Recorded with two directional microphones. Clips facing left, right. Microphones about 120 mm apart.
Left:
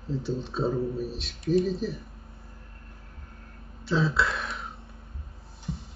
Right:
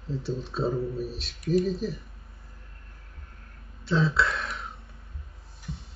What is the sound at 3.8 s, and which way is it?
Speech, centre (ahead or behind).